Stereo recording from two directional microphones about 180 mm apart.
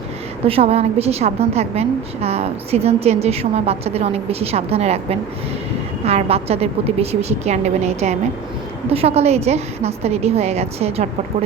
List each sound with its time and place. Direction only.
0.4 s a woman's voice: 35° right (ahead or behind)